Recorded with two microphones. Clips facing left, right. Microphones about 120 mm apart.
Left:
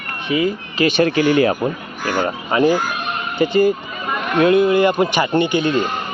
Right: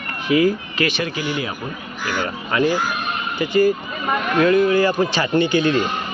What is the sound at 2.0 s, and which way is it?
Speech, 45° left (ahead or behind).